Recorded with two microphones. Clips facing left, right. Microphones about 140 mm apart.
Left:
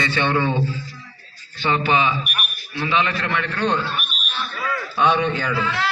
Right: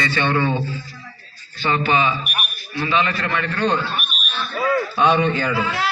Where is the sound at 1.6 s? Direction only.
5° left (ahead or behind).